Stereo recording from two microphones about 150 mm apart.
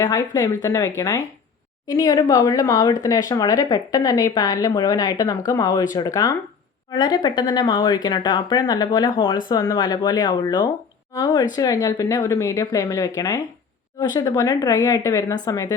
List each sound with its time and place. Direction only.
0.0 s speech: 25° left (ahead or behind)